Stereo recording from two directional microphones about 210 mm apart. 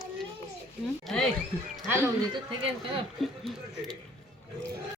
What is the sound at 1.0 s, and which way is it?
Speech, centre (ahead or behind).